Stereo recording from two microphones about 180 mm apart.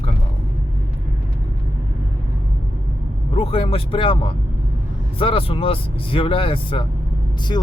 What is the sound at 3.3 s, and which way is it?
Speech, 30° left (ahead or behind).